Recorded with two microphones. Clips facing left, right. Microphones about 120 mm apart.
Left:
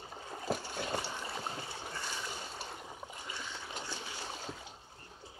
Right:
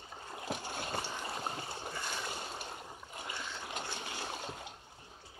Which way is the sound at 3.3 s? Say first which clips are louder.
Right 3 dB; 55° right (ahead or behind).